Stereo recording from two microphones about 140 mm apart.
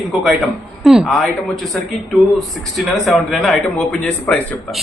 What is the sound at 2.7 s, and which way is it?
Speech, centre (ahead or behind).